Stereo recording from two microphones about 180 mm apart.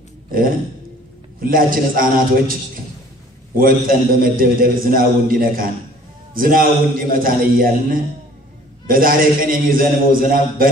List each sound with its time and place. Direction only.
1.4 s a man's voice: 50° right (ahead or behind)
3.5 s a man's voice: 50° right (ahead or behind)